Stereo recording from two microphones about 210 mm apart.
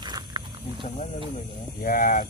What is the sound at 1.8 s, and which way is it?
Speech, 40° left (ahead or behind).